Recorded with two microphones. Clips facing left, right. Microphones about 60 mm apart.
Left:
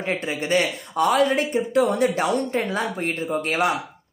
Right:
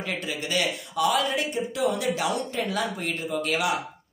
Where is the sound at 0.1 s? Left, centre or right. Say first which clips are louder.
Left 7 dB; left.